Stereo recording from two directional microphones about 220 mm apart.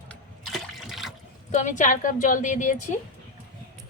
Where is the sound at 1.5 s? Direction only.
35° left (ahead or behind).